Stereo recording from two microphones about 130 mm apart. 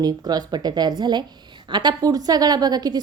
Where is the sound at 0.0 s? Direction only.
30° right (ahead or behind).